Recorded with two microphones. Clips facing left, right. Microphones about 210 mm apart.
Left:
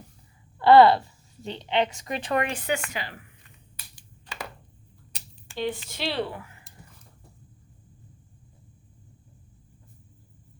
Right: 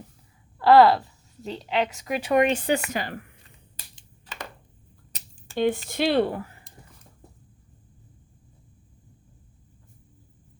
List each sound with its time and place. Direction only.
0.6 s a woman's voice: centre (ahead or behind)
2.5 s speech: 30° right (ahead or behind)
2.9 s speech: 45° right (ahead or behind)
5.1 s speech: 45° right (ahead or behind)